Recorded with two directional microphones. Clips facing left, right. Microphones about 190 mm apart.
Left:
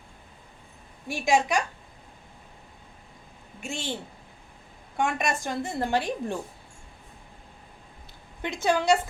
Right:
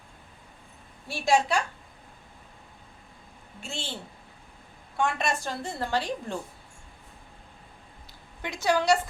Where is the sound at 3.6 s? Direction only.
15° left (ahead or behind).